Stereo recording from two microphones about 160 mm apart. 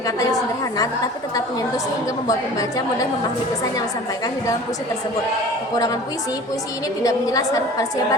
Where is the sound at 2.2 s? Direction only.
20° left (ahead or behind).